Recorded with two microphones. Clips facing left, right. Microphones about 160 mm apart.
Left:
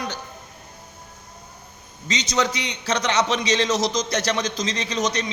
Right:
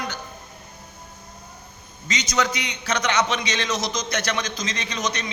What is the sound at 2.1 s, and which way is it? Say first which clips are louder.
A man's voice: left 1 dB; 30° left (ahead or behind).